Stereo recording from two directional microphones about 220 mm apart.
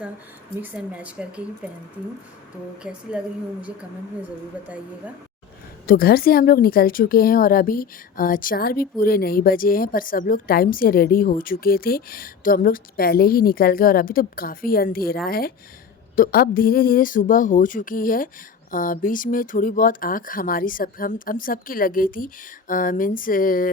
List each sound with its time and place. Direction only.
0.6 s speech: 5° right (ahead or behind)
2.8 s speech: 5° right (ahead or behind)
4.6 s speech: 5° right (ahead or behind)
5.8 s speech: 40° left (ahead or behind)